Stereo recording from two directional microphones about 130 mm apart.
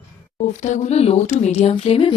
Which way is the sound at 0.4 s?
65° left (ahead or behind).